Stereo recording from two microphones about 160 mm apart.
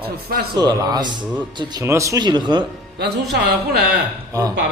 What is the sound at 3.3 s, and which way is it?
Speech, 90° right.